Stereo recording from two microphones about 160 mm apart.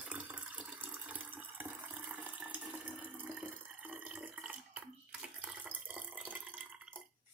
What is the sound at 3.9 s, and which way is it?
Water, 5° right (ahead or behind).